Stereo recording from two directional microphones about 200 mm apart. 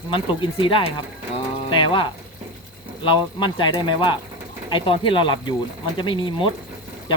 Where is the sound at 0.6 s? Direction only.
25° left (ahead or behind).